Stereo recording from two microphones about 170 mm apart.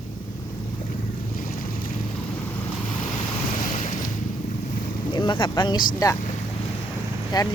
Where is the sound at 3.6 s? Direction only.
50° left (ahead or behind).